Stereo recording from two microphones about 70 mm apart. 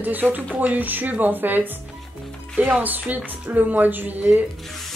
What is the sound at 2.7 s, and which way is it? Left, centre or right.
Speech, right.